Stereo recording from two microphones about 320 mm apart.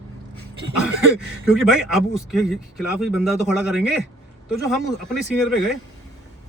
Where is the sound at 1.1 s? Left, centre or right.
Centre.